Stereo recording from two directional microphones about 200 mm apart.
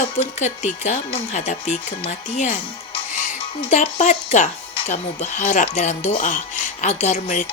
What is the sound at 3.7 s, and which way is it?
Speech, 35° left (ahead or behind).